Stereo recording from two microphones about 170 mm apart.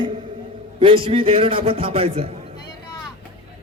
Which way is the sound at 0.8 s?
30° right (ahead or behind).